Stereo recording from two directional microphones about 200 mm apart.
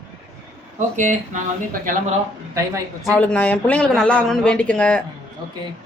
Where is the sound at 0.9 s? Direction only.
40° right (ahead or behind).